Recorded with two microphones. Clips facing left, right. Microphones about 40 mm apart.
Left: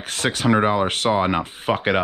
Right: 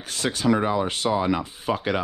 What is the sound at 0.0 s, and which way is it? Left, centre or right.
Speech, left.